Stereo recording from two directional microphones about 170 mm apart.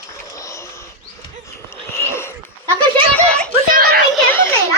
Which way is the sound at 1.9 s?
15° left (ahead or behind).